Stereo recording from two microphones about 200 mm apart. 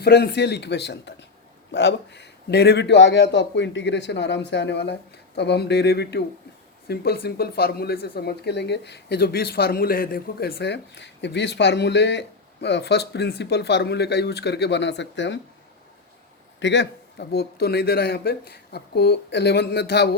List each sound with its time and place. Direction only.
0.0 s a man's voice: 55° left (ahead or behind)
16.6 s a man's voice: 60° left (ahead or behind)